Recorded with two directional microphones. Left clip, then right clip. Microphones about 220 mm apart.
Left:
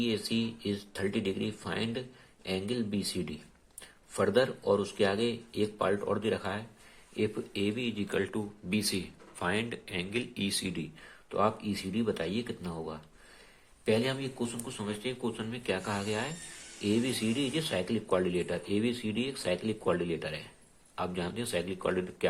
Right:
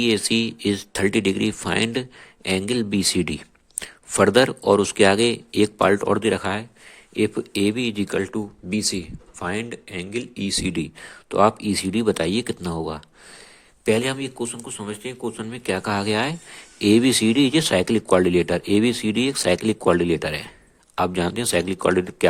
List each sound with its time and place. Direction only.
0.0 s speech: 45° right (ahead or behind); by 10.7 s 25° right (ahead or behind)
10.7 s speech: 45° right (ahead or behind)